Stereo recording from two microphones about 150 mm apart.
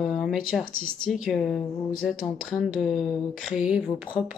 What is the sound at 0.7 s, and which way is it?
Speech, 40° right (ahead or behind).